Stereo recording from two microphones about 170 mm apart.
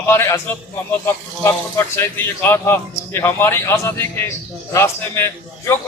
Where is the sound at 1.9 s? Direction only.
15° left (ahead or behind).